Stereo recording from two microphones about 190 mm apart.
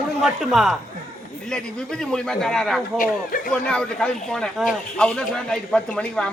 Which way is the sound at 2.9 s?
45° left (ahead or behind).